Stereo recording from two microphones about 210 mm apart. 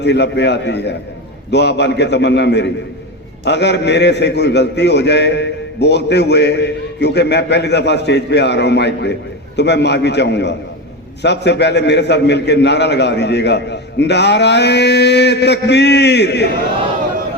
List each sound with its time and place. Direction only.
0.0 s a man's voice: 55° left (ahead or behind)